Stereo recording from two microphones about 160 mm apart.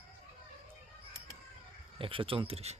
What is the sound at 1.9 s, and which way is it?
Speech, 35° right (ahead or behind).